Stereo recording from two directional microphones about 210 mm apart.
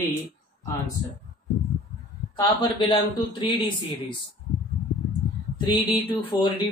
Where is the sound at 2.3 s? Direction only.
25° left (ahead or behind).